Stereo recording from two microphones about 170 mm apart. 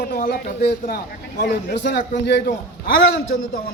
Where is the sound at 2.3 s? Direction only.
75° left (ahead or behind).